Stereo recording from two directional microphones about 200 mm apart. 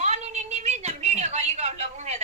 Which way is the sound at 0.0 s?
35° right (ahead or behind).